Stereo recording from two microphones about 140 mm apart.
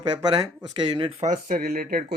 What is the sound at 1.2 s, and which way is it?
Speech, 75° right (ahead or behind).